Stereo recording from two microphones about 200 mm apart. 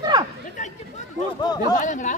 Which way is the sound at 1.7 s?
40° left (ahead or behind).